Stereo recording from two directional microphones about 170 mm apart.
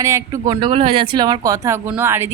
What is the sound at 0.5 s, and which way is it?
Speech, 30° right (ahead or behind).